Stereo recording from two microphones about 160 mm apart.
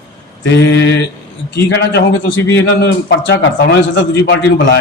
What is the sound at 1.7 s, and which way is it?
Speech, 90° left.